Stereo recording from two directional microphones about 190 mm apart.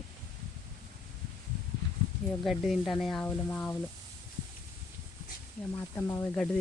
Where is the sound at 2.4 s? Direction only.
Centre (ahead or behind).